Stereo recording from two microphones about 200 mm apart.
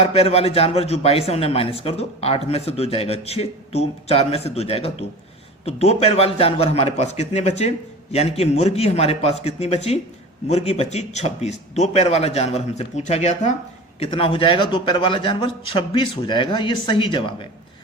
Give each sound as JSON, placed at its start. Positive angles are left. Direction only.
{"t": 0.0, "sound": "a man's voice", "side_deg": 30}